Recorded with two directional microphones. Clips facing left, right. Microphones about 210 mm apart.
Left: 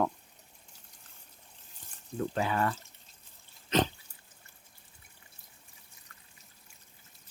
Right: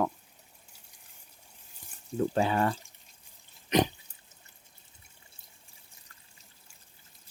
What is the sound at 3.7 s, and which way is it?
Drip, 15° right (ahead or behind).